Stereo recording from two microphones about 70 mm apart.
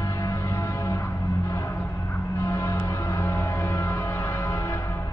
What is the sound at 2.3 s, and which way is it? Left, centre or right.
Music, left.